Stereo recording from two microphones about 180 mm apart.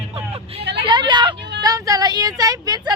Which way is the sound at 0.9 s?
25° right (ahead or behind).